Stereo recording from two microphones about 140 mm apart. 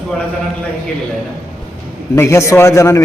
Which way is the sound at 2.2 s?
20° left (ahead or behind).